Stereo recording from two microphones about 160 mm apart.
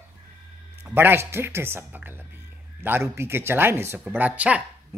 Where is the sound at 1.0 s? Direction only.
15° right (ahead or behind).